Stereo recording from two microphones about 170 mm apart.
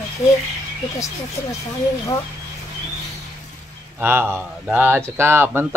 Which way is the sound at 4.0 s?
15° right (ahead or behind).